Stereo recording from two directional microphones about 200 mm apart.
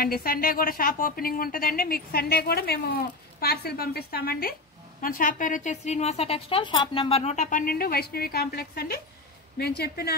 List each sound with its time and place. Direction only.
0.0 s a woman's voice: 50° left (ahead or behind)